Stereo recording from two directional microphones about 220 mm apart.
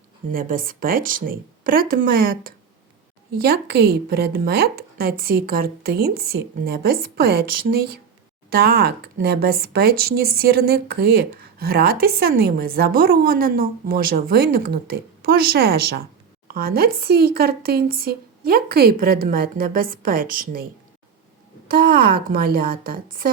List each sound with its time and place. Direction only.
0.3 s a woman's voice: 40° right (ahead or behind)
21.7 s a woman's voice: 45° right (ahead or behind)